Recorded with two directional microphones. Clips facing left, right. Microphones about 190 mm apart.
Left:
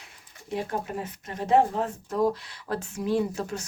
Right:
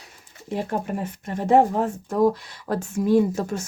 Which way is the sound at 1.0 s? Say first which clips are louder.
Right 5 dB; 50° right (ahead or behind).